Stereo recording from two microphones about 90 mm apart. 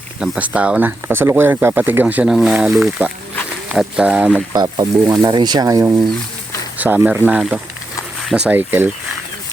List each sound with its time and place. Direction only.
0.2 s speech: 15° right (ahead or behind)
2.2 s speech: 5° right (ahead or behind)
4.0 s speech: 15° right (ahead or behind)
4.5 s speech: 55° right (ahead or behind)
5.8 s speech: 35° right (ahead or behind)
6.7 s speech: 20° right (ahead or behind)